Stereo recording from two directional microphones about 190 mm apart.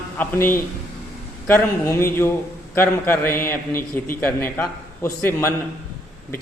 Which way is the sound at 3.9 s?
10° left (ahead or behind).